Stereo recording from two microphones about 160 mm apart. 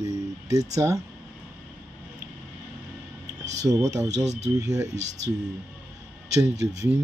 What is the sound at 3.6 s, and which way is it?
Speech, 20° right (ahead or behind).